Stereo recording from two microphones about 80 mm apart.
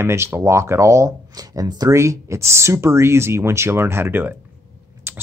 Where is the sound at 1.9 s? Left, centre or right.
Right.